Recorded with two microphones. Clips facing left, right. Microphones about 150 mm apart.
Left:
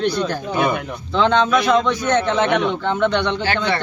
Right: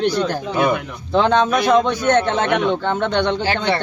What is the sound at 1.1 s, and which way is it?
Speech, 45° right (ahead or behind).